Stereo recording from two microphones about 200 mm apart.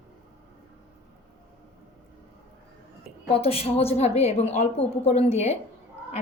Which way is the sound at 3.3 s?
30° left (ahead or behind).